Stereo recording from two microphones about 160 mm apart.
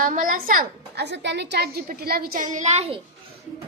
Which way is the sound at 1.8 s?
70° right (ahead or behind).